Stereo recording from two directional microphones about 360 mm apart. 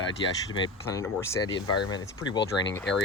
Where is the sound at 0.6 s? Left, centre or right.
Centre.